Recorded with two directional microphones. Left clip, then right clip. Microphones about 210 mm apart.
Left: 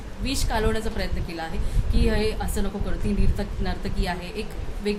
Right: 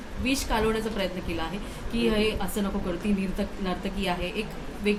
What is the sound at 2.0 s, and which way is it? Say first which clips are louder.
Speech: even; 20° left (ahead or behind).